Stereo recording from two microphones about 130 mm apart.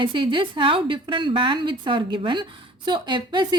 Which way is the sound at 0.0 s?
40° right (ahead or behind).